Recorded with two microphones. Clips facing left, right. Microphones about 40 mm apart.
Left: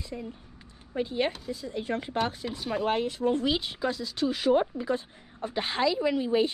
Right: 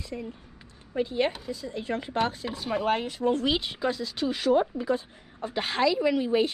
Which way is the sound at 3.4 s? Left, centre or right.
Centre.